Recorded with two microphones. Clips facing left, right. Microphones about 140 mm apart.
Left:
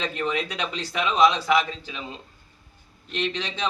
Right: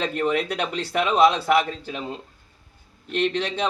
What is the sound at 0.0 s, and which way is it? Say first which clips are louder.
Speech: right 4 dB; 50° right (ahead or behind).